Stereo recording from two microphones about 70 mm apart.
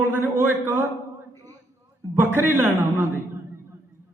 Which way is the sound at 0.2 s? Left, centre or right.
Right.